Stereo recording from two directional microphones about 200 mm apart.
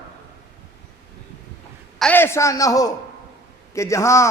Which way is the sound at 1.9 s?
10° left (ahead or behind).